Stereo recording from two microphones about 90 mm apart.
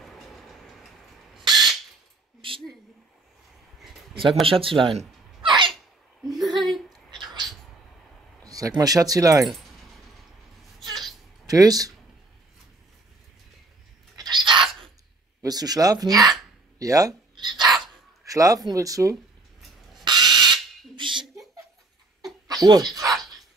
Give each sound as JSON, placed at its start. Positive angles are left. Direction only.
{"t": 0.0, "sound": "vehicle", "side_deg": 0}
{"t": 1.4, "sound": "a sound", "side_deg": -50}
{"t": 4.5, "sound": "speech", "side_deg": -85}
{"t": 6.2, "sound": "a sound", "side_deg": 0}
{"t": 8.5, "sound": "speech", "side_deg": -40}
{"t": 11.4, "sound": "speech", "side_deg": -45}
{"t": 14.1, "sound": "bird", "side_deg": -50}
{"t": 15.4, "sound": "speech", "side_deg": -45}
{"t": 17.4, "sound": "a sound", "side_deg": -55}
{"t": 18.2, "sound": "speech", "side_deg": -40}
{"t": 20.1, "sound": "a sound", "side_deg": -50}
{"t": 22.5, "sound": "speech", "side_deg": -45}